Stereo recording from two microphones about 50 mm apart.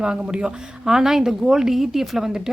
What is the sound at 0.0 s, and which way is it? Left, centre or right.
A woman's voice, centre.